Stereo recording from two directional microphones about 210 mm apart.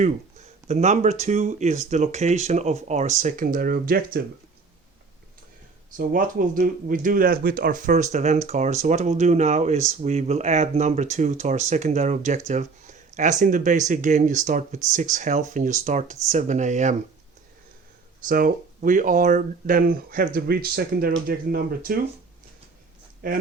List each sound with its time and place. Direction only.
0.0 s speech: 30° right (ahead or behind)
6.0 s speech: 40° right (ahead or behind)
18.3 s speech: 40° right (ahead or behind)
23.2 s speech: 40° right (ahead or behind)